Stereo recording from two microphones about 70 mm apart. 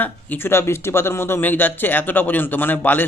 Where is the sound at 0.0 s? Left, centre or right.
Left.